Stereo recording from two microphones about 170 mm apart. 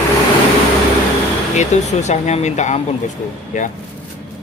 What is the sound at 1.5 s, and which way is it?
Speech, 40° left (ahead or behind).